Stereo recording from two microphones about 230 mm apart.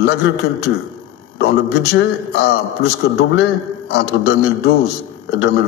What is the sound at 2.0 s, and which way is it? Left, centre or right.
A man's voice, left.